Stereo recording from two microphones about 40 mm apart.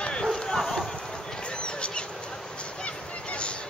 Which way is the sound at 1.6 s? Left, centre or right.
Left.